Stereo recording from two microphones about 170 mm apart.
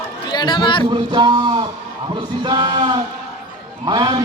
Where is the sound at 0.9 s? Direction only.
25° right (ahead or behind).